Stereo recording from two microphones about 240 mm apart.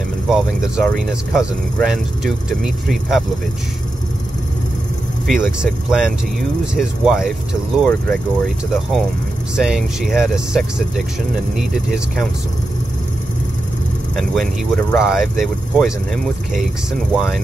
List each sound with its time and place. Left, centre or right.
0.3 s speech: centre
5.2 s speech: centre
9.6 s speech: centre
14.1 s speech: centre